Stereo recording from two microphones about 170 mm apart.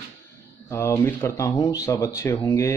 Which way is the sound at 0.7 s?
15° left (ahead or behind).